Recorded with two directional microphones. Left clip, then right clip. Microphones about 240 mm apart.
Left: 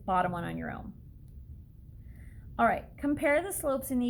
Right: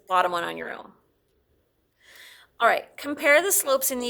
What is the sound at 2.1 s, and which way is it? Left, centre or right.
A woman's voice, right.